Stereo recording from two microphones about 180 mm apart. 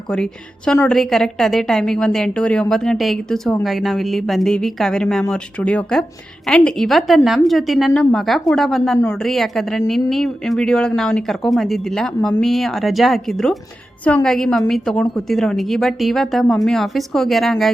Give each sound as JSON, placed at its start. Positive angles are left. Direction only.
{"t": 0.1, "sound": "a woman's voice", "side_deg": 5}